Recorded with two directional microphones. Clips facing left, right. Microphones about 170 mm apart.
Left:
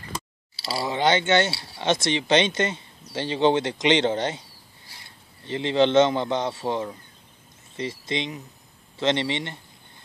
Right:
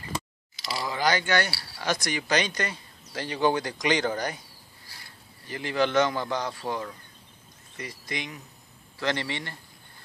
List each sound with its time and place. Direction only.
0.6 s a man's voice: 30° left (ahead or behind)